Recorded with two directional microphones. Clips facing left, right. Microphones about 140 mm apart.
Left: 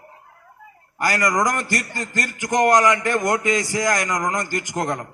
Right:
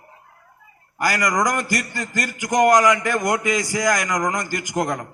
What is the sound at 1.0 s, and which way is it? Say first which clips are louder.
A man's voice: even; 30° left (ahead or behind).